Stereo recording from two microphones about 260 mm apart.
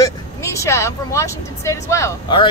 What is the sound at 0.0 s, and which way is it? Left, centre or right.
Speech, centre.